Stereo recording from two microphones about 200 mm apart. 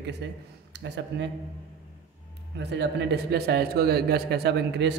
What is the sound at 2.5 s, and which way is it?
A man's voice, 55° right (ahead or behind).